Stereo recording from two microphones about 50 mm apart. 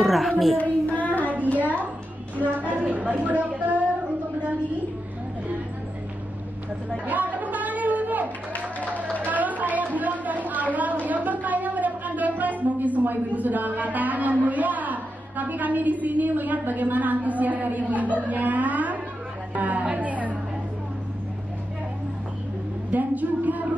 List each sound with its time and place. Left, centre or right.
0.0 s a sound: centre
0.6 s child singing: left
1.3 s a woman's voice: right
7.1 s a sound: right
9.1 s a woman's voice: right
22.8 s speech: right